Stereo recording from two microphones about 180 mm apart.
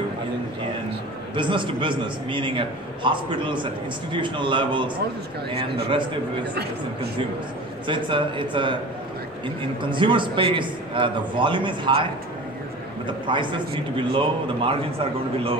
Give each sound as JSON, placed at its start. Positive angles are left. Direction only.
{"t": 1.3, "sound": "a man's voice", "side_deg": -25}
{"t": 7.8, "sound": "a man's voice", "side_deg": -25}
{"t": 9.8, "sound": "a man's voice", "side_deg": -25}